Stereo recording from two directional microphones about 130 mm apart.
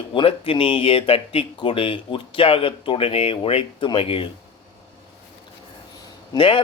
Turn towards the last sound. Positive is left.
turn(degrees=40)  # may be behind; listen again after turning